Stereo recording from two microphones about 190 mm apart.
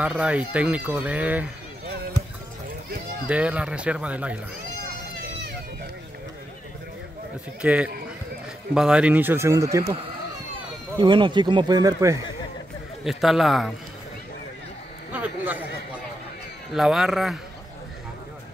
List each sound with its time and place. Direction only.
0.0 s speech: 5° right (ahead or behind)
3.3 s speech: 5° right (ahead or behind)
7.6 s speech: 5° right (ahead or behind)
11.0 s speech: 25° right (ahead or behind)
13.0 s a man's voice: centre (ahead or behind)
15.1 s a sound: 10° right (ahead or behind)
16.7 s a man's voice: centre (ahead or behind)